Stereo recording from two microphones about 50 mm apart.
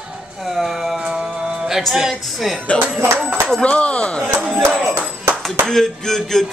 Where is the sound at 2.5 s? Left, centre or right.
Centre.